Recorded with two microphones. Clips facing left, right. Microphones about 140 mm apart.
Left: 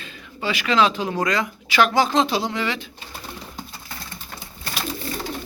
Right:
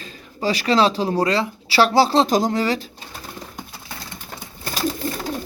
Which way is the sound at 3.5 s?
20° right (ahead or behind).